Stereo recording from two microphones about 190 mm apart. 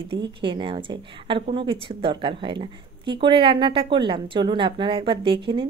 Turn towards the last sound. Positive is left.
turn(degrees=-25)  # may be behind; listen again after turning